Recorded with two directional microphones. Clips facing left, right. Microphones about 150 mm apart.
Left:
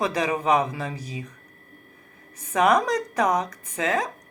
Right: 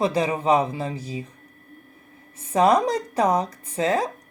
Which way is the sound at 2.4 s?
30° right (ahead or behind).